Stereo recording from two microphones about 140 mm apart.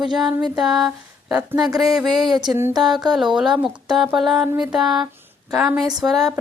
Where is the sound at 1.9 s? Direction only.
Centre (ahead or behind).